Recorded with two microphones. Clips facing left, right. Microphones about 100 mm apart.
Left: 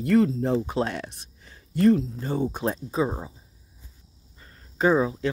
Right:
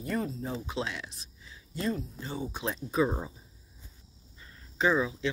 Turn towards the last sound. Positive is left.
turn(degrees=40)  # may be behind; listen again after turning